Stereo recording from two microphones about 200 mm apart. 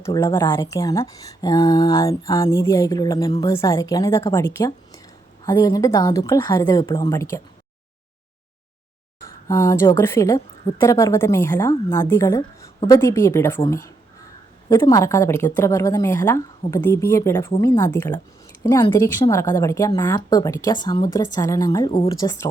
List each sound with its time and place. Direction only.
0.0 s a woman's voice: 15° left (ahead or behind)
9.5 s a woman's voice: 15° left (ahead or behind)
21.8 s speech: 25° left (ahead or behind)